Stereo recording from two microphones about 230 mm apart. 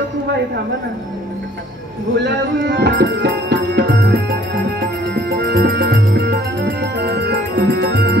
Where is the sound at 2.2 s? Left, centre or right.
Right.